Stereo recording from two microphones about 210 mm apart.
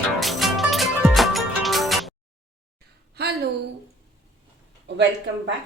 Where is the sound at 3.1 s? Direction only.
50° right (ahead or behind).